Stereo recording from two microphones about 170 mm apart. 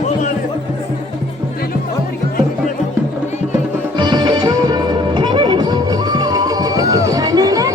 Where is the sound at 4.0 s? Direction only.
25° right (ahead or behind).